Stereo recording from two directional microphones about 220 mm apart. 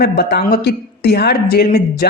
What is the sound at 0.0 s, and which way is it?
A man's voice, 45° left (ahead or behind).